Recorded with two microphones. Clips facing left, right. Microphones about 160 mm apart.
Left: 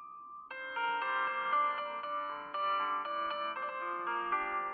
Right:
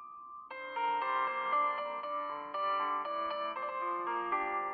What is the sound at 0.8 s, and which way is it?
Music, 40° right (ahead or behind).